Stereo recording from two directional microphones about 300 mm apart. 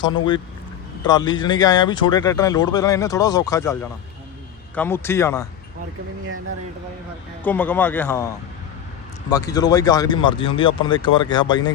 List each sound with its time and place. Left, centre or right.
0.0 s speech: centre
7.4 s speech: centre
9.3 s speech: centre